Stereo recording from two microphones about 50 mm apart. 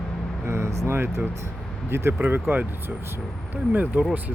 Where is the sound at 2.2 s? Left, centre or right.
Right.